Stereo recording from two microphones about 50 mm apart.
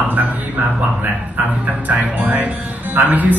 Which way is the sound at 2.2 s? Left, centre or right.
Right.